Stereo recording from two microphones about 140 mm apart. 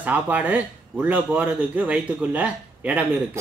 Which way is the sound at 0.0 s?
10° right (ahead or behind).